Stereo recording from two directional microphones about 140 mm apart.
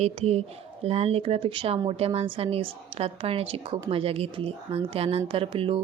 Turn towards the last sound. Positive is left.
turn(degrees=-40)  # may be behind; listen again after turning